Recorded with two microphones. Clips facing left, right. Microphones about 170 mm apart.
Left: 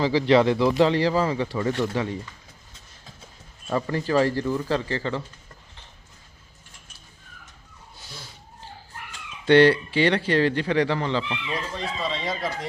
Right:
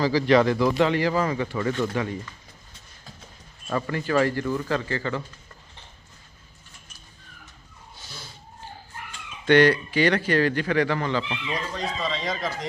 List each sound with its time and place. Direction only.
0.0 s speech: 25° left (ahead or behind)
3.7 s speech: 20° left (ahead or behind)
3.9 s speech: 30° left (ahead or behind)
9.5 s speech: 30° left (ahead or behind)
11.5 s speech: 5° left (ahead or behind)